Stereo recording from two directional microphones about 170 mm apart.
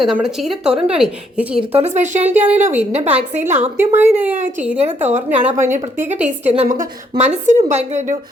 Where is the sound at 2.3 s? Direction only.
10° right (ahead or behind).